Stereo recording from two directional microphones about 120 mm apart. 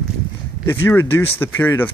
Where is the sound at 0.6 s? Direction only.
20° left (ahead or behind).